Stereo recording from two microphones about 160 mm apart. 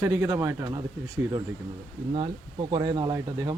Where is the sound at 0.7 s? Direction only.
25° right (ahead or behind).